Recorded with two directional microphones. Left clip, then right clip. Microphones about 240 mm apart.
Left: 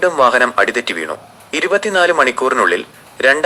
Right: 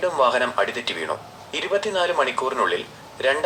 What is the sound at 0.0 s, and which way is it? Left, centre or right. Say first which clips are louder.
Speech: left 8 dB; left.